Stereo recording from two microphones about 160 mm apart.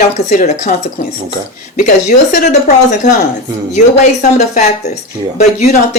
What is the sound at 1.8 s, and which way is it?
Speech, 50° left (ahead or behind).